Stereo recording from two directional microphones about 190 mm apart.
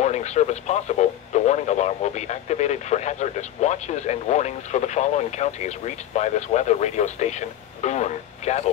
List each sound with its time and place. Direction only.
0.0 s speech: 35° left (ahead or behind)